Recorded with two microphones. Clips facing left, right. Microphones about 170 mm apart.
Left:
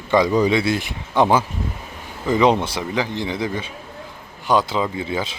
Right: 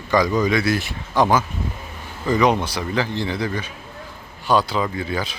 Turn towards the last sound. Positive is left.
turn(degrees=20)  # may be behind; listen again after turning